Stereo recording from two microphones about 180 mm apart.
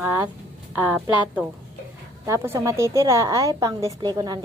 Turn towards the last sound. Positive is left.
turn(degrees=-20)  # may be behind; listen again after turning